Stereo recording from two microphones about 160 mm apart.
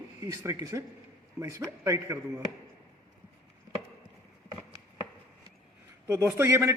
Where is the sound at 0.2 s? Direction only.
20° right (ahead or behind).